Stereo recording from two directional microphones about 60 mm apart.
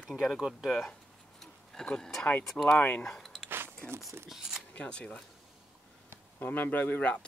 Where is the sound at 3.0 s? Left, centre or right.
Centre.